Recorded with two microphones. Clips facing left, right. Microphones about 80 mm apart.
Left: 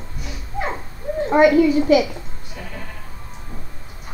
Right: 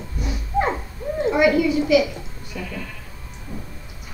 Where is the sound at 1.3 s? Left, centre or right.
Left.